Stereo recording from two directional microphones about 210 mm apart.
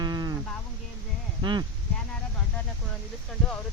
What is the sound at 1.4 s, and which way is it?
Speech, 20° right (ahead or behind).